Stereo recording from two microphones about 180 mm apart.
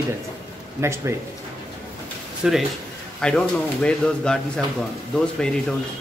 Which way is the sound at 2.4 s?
5° right (ahead or behind).